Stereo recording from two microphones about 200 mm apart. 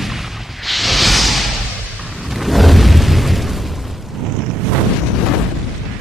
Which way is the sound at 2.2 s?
Centre (ahead or behind).